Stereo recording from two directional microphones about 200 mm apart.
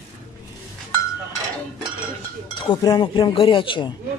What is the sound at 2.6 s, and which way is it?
Speech, 20° left (ahead or behind).